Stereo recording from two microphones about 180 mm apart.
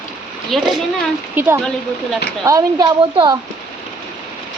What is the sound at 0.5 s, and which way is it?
Speech, centre (ahead or behind).